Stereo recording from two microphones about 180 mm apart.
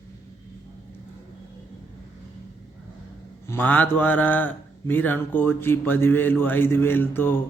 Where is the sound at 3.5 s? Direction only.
10° left (ahead or behind).